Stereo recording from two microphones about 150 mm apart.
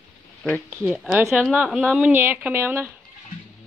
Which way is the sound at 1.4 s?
Centre (ahead or behind).